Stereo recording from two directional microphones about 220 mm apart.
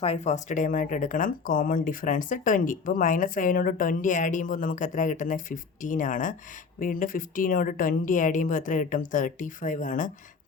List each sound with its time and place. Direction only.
0.0 s speech: 30° left (ahead or behind)